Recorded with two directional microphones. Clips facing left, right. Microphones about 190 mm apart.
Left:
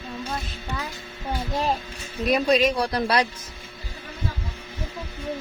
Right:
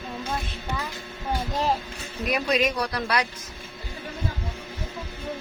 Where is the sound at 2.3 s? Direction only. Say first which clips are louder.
Left 4 dB; 30° left (ahead or behind).